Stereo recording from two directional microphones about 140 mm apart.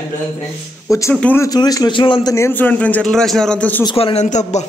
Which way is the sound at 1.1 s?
10° left (ahead or behind).